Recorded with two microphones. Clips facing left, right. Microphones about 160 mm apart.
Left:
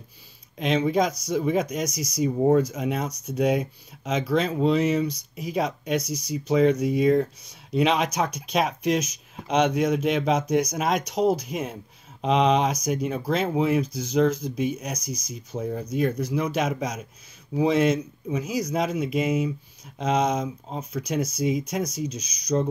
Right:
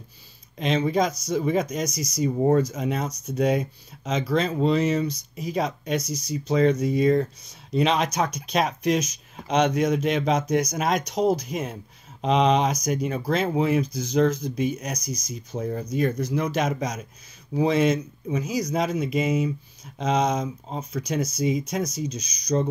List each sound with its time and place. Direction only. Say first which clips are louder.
0.6 s speech: even; 5° left (ahead or behind)